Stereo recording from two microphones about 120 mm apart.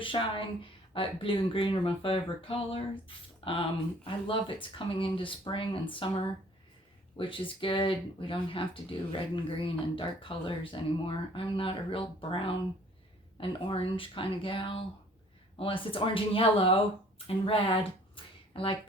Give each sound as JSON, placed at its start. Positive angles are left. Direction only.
{"t": 0.0, "sound": "speech", "side_deg": 45}
{"t": 4.0, "sound": "speech", "side_deg": 45}